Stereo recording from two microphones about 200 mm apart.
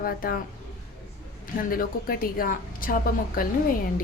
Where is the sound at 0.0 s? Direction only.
45° left (ahead or behind).